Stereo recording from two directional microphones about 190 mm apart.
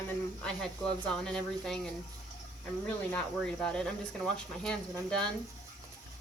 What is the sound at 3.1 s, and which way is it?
Speech, 5° left (ahead or behind).